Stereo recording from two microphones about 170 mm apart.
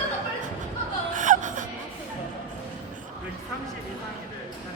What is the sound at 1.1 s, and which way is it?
Laughter, 50° right (ahead or behind).